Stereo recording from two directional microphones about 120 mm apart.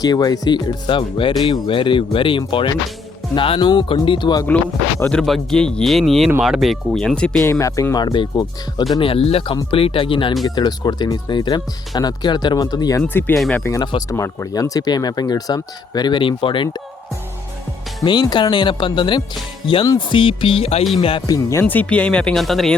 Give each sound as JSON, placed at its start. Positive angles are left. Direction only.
{"t": 0.0, "sound": "speech", "side_deg": 35}
{"t": 5.0, "sound": "speech", "side_deg": 5}
{"t": 7.4, "sound": "speech", "side_deg": 25}
{"t": 13.0, "sound": "speech", "side_deg": 15}
{"t": 14.1, "sound": "speech", "side_deg": 25}
{"t": 18.0, "sound": "speech", "side_deg": 40}
{"t": 21.2, "sound": "speech", "side_deg": 30}
{"t": 21.6, "sound": "speech", "side_deg": 15}